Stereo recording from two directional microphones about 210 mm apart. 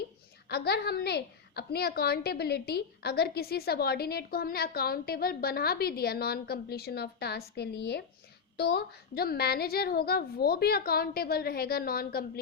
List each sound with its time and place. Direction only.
0.4 s a woman's voice: 50° left (ahead or behind)